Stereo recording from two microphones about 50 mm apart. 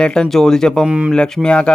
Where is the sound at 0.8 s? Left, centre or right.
Right.